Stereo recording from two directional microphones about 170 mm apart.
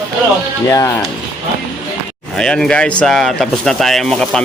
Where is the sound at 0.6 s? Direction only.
15° left (ahead or behind).